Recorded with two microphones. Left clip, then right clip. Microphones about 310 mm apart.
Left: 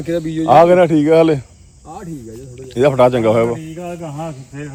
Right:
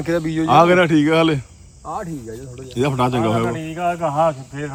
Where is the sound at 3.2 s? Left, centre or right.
Centre.